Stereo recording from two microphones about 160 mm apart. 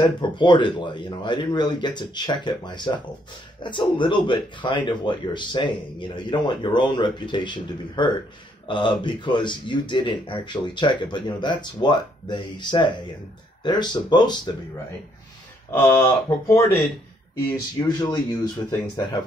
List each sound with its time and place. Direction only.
0.2 s speech: 30° left (ahead or behind)
15.7 s speech: 15° left (ahead or behind)